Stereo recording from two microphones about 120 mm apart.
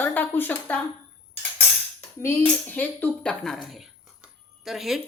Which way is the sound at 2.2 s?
20° left (ahead or behind).